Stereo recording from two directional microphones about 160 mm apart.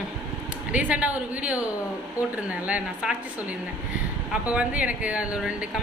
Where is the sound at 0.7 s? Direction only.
10° right (ahead or behind).